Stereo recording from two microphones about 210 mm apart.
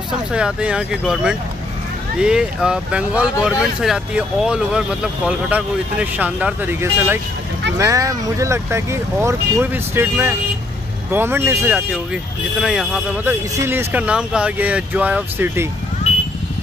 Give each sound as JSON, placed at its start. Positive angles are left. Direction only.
{"t": 0.3, "sound": "speech", "side_deg": -5}
{"t": 16.1, "sound": "vehicle", "side_deg": 30}